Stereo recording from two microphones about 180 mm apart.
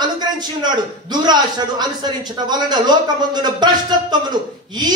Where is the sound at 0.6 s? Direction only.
25° right (ahead or behind).